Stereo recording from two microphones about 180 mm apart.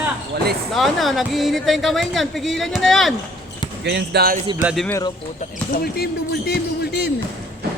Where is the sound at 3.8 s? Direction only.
70° right (ahead or behind).